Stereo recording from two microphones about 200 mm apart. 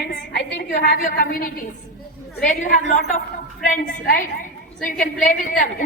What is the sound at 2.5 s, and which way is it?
A woman's voice, 40° left (ahead or behind).